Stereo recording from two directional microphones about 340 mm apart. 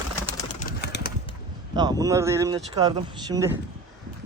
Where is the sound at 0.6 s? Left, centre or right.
Left.